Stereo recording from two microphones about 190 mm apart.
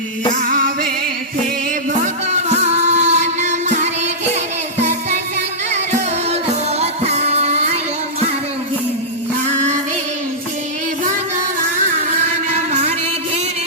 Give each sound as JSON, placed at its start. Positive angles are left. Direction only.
{"t": 0.3, "sound": "music", "side_deg": -45}
{"t": 2.3, "sound": "music", "side_deg": -35}
{"t": 4.8, "sound": "music", "side_deg": -35}
{"t": 6.3, "sound": "music", "side_deg": -35}
{"t": 9.5, "sound": "music", "side_deg": -40}
{"t": 12.5, "sound": "a sound", "side_deg": -35}